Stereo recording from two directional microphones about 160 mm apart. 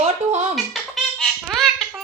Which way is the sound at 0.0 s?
40° right (ahead or behind).